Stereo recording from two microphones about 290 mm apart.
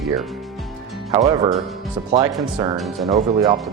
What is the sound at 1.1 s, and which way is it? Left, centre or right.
Speech, centre.